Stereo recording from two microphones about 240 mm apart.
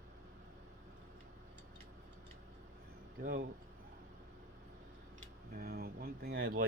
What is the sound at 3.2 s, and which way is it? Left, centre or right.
Speech, right.